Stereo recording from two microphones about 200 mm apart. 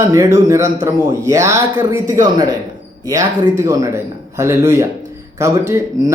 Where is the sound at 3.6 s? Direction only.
15° right (ahead or behind).